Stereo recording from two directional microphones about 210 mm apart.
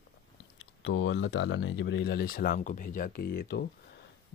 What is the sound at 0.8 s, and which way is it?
Speech, 65° left (ahead or behind).